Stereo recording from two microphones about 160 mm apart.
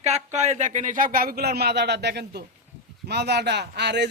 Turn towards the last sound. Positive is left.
turn(degrees=-90)